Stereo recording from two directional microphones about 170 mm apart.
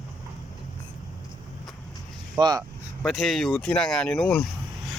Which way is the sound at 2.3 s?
25° right (ahead or behind).